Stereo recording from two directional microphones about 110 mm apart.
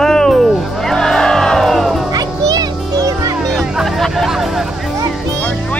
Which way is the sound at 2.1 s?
35° right (ahead or behind).